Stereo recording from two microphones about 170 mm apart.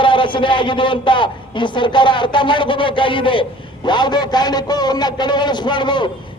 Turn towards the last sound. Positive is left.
turn(degrees=25)  # may be behind; listen again after turning